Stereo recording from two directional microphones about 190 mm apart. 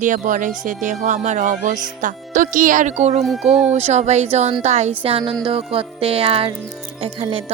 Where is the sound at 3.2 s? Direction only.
Centre (ahead or behind).